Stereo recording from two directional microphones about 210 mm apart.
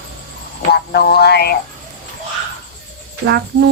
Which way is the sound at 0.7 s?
50° left (ahead or behind).